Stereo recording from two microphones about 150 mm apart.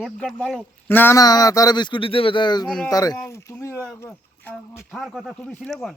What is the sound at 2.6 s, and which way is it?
Speech, 5° left (ahead or behind).